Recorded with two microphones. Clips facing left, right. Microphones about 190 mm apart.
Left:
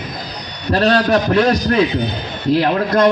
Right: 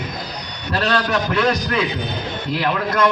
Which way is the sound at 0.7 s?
35° left (ahead or behind).